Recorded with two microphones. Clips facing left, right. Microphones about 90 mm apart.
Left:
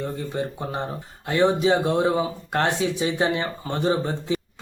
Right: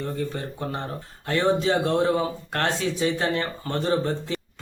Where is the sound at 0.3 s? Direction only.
15° left (ahead or behind).